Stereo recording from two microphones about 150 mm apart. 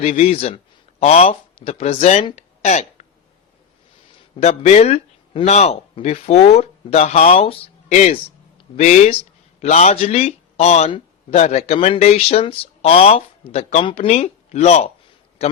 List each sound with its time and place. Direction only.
0.2 s speech: 40° left (ahead or behind)
2.3 s a sound: 50° left (ahead or behind)
4.4 s speech: 45° left (ahead or behind)